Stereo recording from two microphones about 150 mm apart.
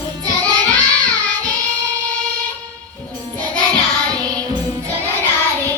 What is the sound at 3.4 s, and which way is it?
Child singing, 5° left (ahead or behind).